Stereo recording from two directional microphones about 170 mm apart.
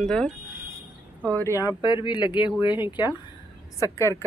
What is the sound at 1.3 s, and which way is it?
Speech, 15° left (ahead or behind).